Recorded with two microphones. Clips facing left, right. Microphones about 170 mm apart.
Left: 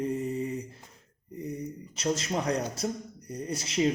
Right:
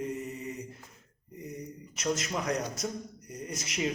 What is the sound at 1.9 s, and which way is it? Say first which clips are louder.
Speech: left 2 dB; 30° left (ahead or behind).